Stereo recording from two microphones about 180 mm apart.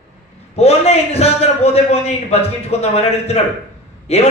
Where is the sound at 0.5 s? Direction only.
35° left (ahead or behind).